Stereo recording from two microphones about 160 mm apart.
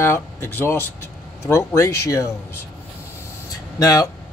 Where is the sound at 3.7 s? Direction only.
20° left (ahead or behind).